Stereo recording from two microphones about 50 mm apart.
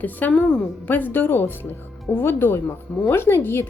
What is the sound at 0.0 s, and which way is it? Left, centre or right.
Speech, left.